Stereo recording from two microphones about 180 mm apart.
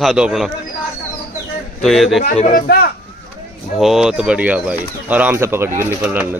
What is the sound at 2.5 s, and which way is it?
Speech, 60° left (ahead or behind).